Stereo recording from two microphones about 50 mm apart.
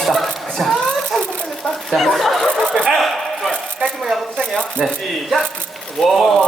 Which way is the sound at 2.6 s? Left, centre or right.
Centre.